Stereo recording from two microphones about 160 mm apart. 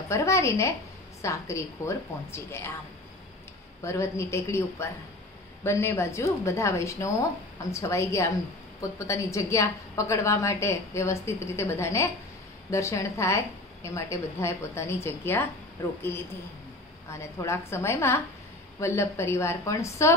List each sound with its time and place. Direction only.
0.1 s a woman's voice: 15° left (ahead or behind)
3.8 s a woman's voice: 15° left (ahead or behind)
17.1 s a woman's voice: 15° left (ahead or behind)